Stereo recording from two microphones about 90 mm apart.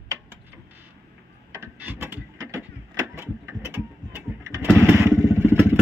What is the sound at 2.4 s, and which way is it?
Vehicle, 35° right (ahead or behind).